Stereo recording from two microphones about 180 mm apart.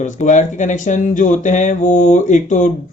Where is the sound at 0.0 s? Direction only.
45° left (ahead or behind).